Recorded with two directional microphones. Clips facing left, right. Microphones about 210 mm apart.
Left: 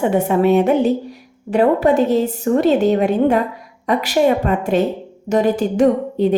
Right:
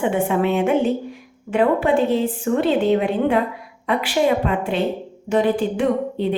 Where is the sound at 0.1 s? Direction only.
40° left (ahead or behind).